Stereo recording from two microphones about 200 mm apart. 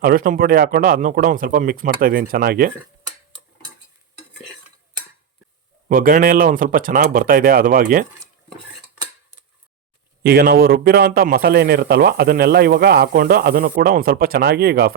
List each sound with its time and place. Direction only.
0.0 s a man's voice: 45° right (ahead or behind)
5.9 s a man's voice: 45° right (ahead or behind)
10.2 s a man's voice: 50° right (ahead or behind)